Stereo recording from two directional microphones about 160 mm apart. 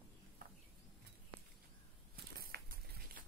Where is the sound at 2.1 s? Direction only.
70° right (ahead or behind).